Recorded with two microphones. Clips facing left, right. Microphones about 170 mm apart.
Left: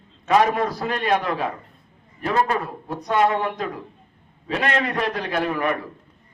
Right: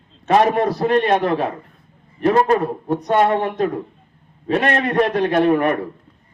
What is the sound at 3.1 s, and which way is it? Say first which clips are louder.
Speech: right 3 dB; 50° right (ahead or behind).